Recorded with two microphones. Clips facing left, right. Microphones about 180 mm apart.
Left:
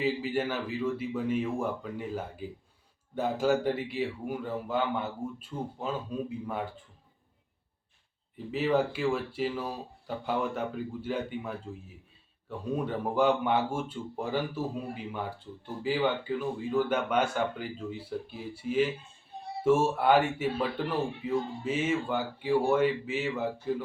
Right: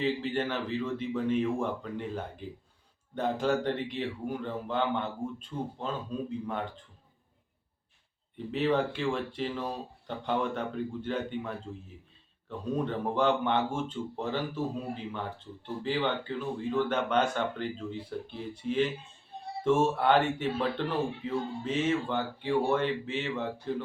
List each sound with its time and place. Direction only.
0.0 s speech: 10° left (ahead or behind)
8.4 s speech: 5° left (ahead or behind)